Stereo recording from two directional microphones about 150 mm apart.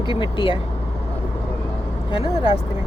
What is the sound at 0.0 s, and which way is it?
Speech, 30° left (ahead or behind).